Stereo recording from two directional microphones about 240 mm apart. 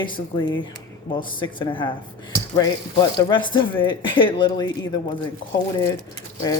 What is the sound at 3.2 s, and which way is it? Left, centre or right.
Speech, centre.